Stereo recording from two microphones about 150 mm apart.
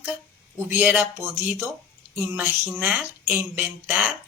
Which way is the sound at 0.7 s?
10° right (ahead or behind).